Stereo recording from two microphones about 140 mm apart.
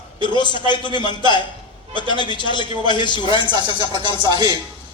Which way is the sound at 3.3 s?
30° right (ahead or behind).